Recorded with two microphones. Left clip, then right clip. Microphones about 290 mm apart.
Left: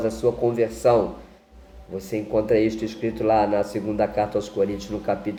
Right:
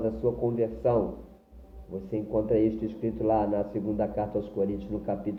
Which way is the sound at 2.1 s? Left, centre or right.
Left.